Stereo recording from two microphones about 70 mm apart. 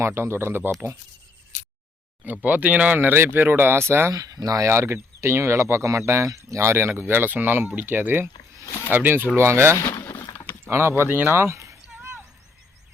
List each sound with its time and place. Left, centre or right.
0.0 s speech: right
2.2 s speech: right
4.1 s speech: right
4.7 s speech: right
8.6 s speech: left
8.9 s speech: right
11.4 s a sound: right